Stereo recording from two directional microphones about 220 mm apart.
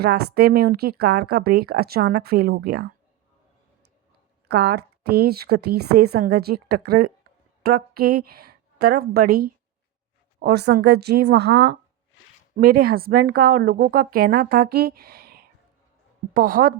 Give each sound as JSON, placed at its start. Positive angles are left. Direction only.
{"t": 0.0, "sound": "speech", "side_deg": -45}
{"t": 4.4, "sound": "a woman's voice", "side_deg": -45}